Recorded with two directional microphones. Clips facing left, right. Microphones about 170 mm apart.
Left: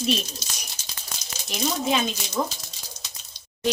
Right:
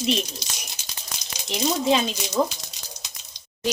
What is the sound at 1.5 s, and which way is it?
Speech, 25° right (ahead or behind).